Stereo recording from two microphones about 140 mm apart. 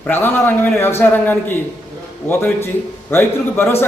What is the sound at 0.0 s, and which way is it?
Speech, 15° left (ahead or behind).